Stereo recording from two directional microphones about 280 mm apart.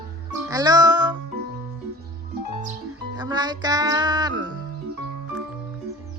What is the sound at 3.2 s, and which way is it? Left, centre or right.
Music, centre.